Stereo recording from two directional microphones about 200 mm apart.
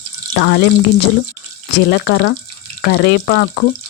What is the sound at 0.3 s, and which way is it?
Speech, 65° left (ahead or behind).